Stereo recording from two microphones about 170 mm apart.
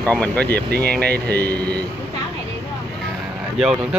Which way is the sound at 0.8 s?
70° right (ahead or behind).